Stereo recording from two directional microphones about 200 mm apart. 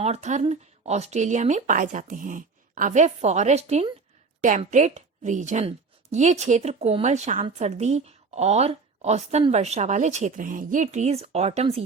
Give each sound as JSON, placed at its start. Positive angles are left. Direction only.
{"t": 0.0, "sound": "a woman's voice", "side_deg": -35}